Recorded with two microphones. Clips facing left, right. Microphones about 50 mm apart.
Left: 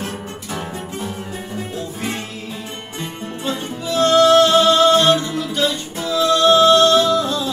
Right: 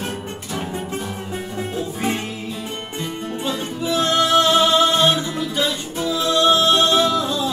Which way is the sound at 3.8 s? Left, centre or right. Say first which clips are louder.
Left 6 dB; centre.